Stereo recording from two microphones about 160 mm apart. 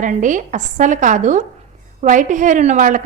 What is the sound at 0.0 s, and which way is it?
A woman's voice, 50° right (ahead or behind).